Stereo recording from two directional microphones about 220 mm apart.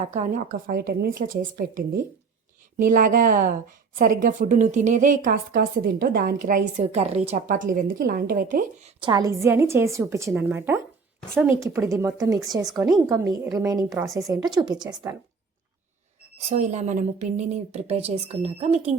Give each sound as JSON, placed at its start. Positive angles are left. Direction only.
{"t": 0.0, "sound": "a woman's voice", "side_deg": -30}
{"t": 9.0, "sound": "a woman's voice", "side_deg": -20}
{"t": 16.5, "sound": "speech", "side_deg": -30}